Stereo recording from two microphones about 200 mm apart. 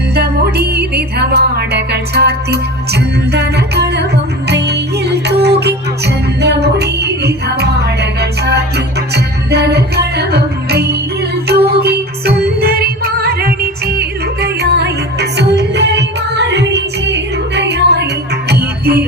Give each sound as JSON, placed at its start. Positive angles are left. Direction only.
{"t": 0.1, "sound": "music", "side_deg": -55}